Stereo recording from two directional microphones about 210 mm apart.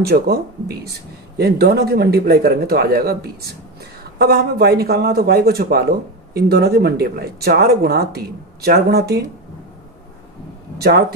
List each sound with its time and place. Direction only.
0.0 s speech: 50° right (ahead or behind)
10.8 s speech: 50° right (ahead or behind)